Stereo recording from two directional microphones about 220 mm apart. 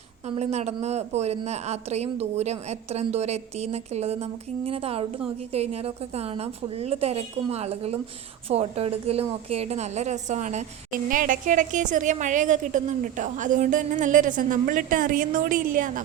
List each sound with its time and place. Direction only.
0.3 s a woman's voice: 30° right (ahead or behind)